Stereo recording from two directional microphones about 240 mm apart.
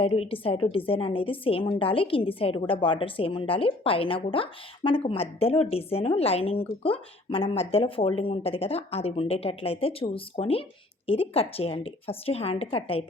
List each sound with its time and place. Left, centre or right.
0.0 s a woman's voice: left